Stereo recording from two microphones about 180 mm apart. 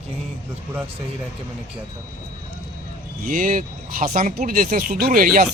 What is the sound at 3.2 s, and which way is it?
Speech, 50° right (ahead or behind).